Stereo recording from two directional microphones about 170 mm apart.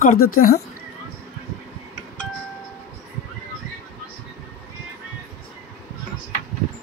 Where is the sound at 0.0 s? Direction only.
50° left (ahead or behind).